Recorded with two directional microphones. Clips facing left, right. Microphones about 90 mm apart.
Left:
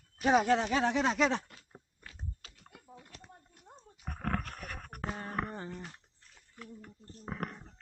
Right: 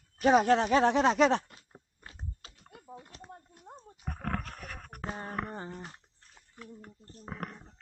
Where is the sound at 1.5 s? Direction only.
30° right (ahead or behind).